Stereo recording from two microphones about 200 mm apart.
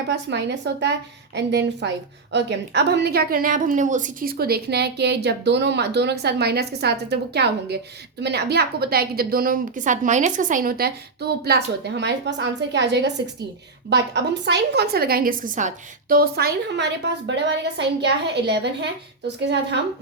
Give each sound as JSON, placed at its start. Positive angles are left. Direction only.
{"t": 0.1, "sound": "a woman's voice", "side_deg": -60}